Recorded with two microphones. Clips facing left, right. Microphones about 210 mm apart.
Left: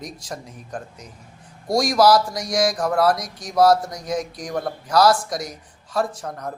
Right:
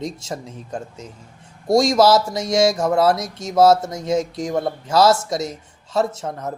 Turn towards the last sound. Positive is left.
turn(degrees=-25)  # may be behind; listen again after turning